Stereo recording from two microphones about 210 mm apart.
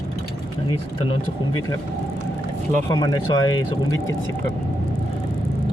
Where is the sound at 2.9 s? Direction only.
20° left (ahead or behind).